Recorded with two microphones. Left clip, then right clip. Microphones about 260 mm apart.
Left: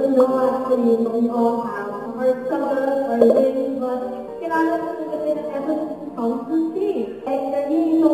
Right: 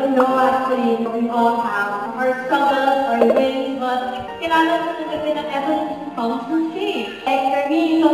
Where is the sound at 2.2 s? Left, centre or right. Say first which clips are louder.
Right 3 dB; centre.